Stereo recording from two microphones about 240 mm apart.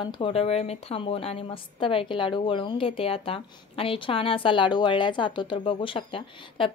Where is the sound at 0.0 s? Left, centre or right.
Left.